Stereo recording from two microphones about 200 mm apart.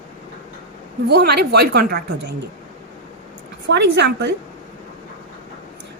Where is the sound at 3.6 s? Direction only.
60° right (ahead or behind).